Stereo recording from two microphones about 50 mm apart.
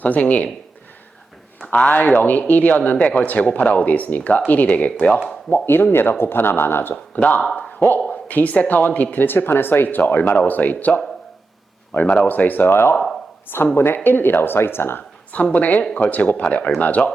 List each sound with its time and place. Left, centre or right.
0.0 s speech: left
1.6 s speech: left
1.9 s speech: left
5.5 s speech: left
7.7 s a sound: left
8.1 s speech: left
12.0 s speech: left
12.3 s speech: left
13.7 s speech: left
15.5 s speech: left